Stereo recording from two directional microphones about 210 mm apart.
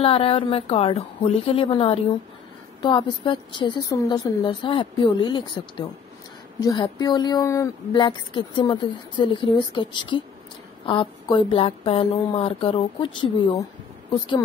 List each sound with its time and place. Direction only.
0.0 s a woman's voice: 25° left (ahead or behind)